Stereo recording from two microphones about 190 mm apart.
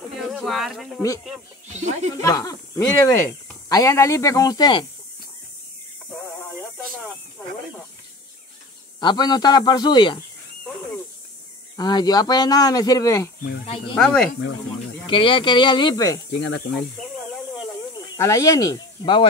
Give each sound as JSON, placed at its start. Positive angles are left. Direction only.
{"t": 0.1, "sound": "speech", "side_deg": 0}
{"t": 1.7, "sound": "speech", "side_deg": -35}
{"t": 2.2, "sound": "speech", "side_deg": 20}
{"t": 6.1, "sound": "a sound", "side_deg": 5}
{"t": 9.0, "sound": "speech", "side_deg": 20}
{"t": 11.7, "sound": "speech", "side_deg": 20}
{"t": 13.9, "sound": "speech", "side_deg": 0}
{"t": 15.0, "sound": "speech", "side_deg": 25}
{"t": 16.3, "sound": "speech", "side_deg": 65}
{"t": 18.1, "sound": "speech", "side_deg": 15}